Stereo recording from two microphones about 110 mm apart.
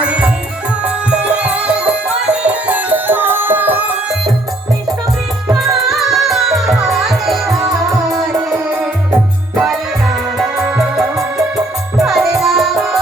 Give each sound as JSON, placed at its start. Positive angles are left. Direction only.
{"t": 0.0, "sound": "music", "side_deg": -10}
{"t": 5.9, "sound": "music", "side_deg": 0}
{"t": 8.3, "sound": "music", "side_deg": -30}
{"t": 10.3, "sound": "music", "side_deg": -5}